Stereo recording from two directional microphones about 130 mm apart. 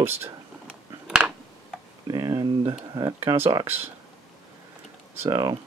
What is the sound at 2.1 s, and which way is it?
Speech, 30° right (ahead or behind).